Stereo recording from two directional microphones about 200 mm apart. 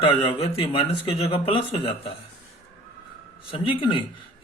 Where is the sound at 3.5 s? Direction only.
25° left (ahead or behind).